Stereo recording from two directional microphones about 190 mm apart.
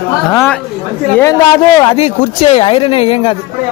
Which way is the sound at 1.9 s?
35° left (ahead or behind).